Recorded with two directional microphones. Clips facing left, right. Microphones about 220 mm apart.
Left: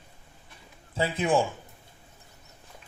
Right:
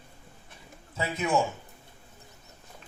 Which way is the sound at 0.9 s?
30° left (ahead or behind).